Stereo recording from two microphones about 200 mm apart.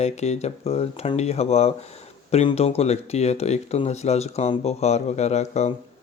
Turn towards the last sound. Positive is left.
turn(degrees=35)  # may be behind; listen again after turning